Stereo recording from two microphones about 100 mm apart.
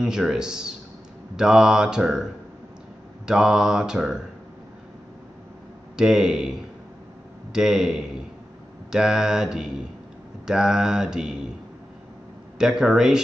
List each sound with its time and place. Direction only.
0.0 s speech: 5° right (ahead or behind)
3.3 s mantra: 5° right (ahead or behind)
5.9 s speech: 5° right (ahead or behind)
7.5 s mantra: 5° right (ahead or behind)
10.4 s speech: 5° right (ahead or behind)
12.5 s speech: 5° right (ahead or behind)